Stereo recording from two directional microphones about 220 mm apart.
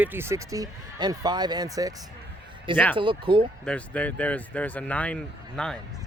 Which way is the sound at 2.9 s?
20° right (ahead or behind).